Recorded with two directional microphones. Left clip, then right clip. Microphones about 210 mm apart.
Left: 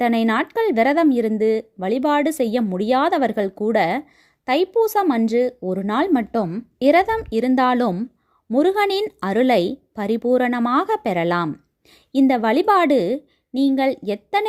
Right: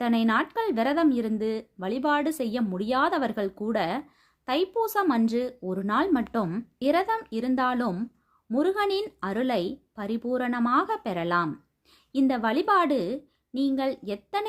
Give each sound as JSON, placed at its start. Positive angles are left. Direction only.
{"t": 0.0, "sound": "speech", "side_deg": 30}
{"t": 6.7, "sound": "speech", "side_deg": 35}